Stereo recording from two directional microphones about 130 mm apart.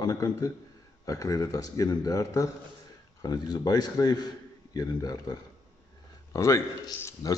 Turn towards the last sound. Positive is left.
turn(degrees=25)  # may be behind; listen again after turning